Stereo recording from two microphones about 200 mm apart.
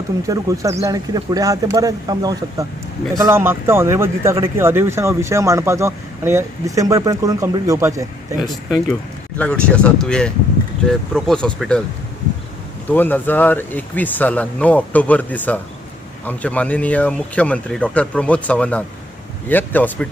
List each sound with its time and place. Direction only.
0.3 s speech: 15° right (ahead or behind)
9.4 s speech: 5° left (ahead or behind)
12.9 s speech: 10° left (ahead or behind)